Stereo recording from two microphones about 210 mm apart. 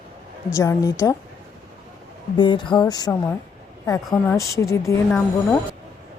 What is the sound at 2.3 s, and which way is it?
A woman's voice, 20° left (ahead or behind).